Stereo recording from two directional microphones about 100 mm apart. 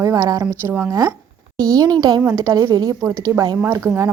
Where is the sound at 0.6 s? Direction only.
20° right (ahead or behind).